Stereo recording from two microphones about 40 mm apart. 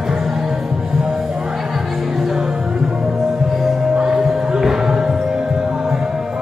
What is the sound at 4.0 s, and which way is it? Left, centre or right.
Music, centre.